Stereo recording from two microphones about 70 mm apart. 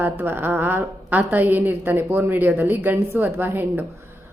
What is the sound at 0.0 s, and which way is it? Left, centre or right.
A woman's voice, right.